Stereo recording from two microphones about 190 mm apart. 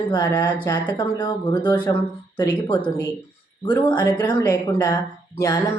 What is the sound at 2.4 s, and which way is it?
Speech, 20° left (ahead or behind).